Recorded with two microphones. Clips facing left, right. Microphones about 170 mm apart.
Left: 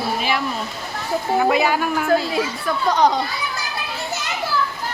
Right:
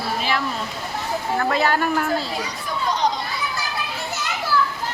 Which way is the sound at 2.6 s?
60° left (ahead or behind).